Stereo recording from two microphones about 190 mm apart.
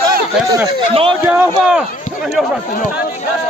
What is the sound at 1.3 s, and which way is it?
Speech, 5° right (ahead or behind).